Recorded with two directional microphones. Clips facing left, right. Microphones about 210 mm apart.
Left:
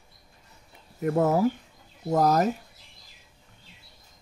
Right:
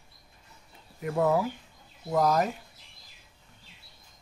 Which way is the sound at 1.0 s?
45° left (ahead or behind).